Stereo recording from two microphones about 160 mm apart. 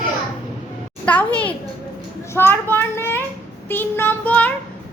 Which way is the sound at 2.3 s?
15° left (ahead or behind).